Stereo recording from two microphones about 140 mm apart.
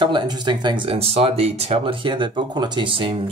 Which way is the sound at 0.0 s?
35° right (ahead or behind).